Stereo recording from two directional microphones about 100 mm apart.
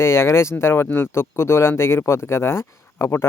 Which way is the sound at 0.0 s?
30° left (ahead or behind).